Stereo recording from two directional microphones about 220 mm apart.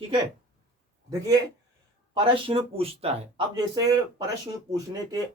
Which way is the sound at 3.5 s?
15° right (ahead or behind).